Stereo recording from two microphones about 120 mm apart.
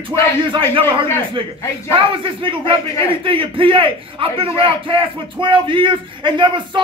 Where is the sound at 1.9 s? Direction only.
45° right (ahead or behind).